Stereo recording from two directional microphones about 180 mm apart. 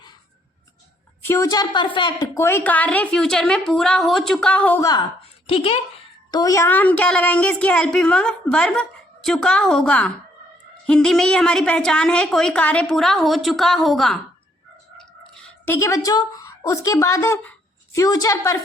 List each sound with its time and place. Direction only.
1.2 s a woman's voice: 15° left (ahead or behind)
5.2 s a sound: 30° left (ahead or behind)
6.3 s a woman's voice: 20° left (ahead or behind)